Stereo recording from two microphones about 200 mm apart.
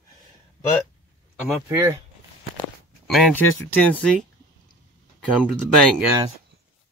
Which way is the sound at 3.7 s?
5° left (ahead or behind).